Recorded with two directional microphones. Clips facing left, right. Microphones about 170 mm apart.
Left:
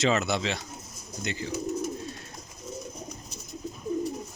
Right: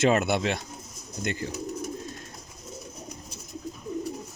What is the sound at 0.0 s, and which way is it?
Speech, 55° right (ahead or behind).